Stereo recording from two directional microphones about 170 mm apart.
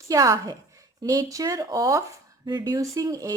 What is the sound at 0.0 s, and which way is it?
A woman's voice, 20° right (ahead or behind).